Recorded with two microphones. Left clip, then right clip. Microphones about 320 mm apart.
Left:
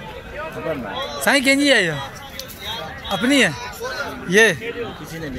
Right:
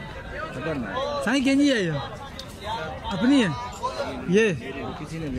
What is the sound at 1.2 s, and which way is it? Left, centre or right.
Speech, centre.